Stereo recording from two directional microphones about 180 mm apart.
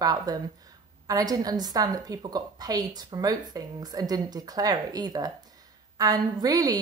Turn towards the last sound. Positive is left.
turn(degrees=-20)  # may be behind; listen again after turning